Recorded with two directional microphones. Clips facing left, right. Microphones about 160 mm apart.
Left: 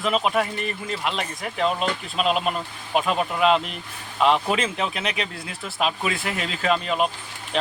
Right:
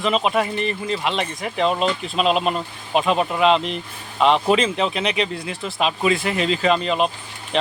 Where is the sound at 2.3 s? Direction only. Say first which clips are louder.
Right 3 dB; 30° right (ahead or behind).